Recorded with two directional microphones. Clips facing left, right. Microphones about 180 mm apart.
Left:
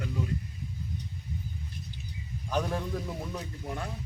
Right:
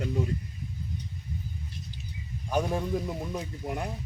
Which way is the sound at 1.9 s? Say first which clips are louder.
Right 1 dB; 55° left (ahead or behind).